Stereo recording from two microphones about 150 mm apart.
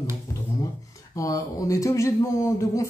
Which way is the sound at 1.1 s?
20° left (ahead or behind).